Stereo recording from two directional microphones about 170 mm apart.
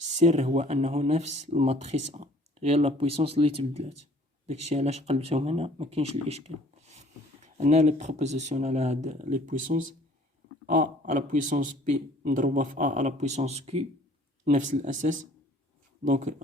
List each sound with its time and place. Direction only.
0.2 s a man's voice: 40° right (ahead or behind)
14.5 s a man's voice: 50° right (ahead or behind)